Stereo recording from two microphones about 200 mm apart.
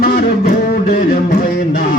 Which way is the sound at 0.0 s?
50° left (ahead or behind).